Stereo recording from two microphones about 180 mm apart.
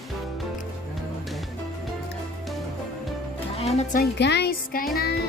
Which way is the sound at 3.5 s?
35° left (ahead or behind).